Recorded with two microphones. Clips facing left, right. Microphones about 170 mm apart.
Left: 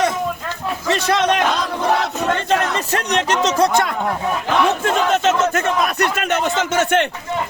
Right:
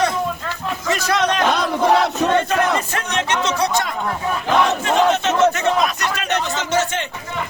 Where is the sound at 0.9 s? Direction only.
30° left (ahead or behind).